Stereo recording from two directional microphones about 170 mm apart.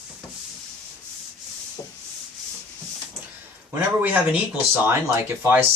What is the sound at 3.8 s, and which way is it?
Speech, 10° right (ahead or behind).